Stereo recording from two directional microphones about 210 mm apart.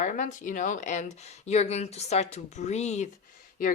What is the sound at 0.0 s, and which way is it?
Speech, 35° left (ahead or behind).